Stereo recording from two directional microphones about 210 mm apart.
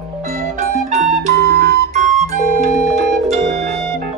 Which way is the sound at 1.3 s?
50° right (ahead or behind).